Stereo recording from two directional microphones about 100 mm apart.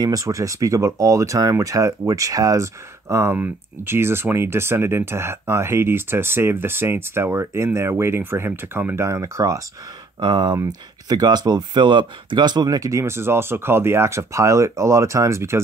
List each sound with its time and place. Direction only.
0.0 s speech: 35° right (ahead or behind)
10.2 s speech: 45° right (ahead or behind); by 15.6 s 30° right (ahead or behind)